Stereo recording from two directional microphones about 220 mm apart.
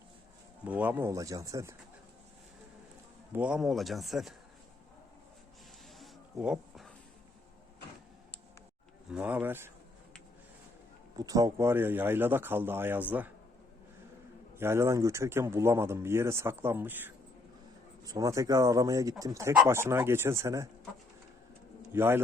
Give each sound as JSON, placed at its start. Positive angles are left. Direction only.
{"t": 0.6, "sound": "speech", "side_deg": -5}
{"t": 3.3, "sound": "speech", "side_deg": -5}
{"t": 6.3, "sound": "a sound", "side_deg": -5}
{"t": 9.0, "sound": "speech", "side_deg": -5}
{"t": 11.2, "sound": "speech", "side_deg": -15}
{"t": 14.6, "sound": "speech", "side_deg": -10}
{"t": 21.9, "sound": "speech", "side_deg": -10}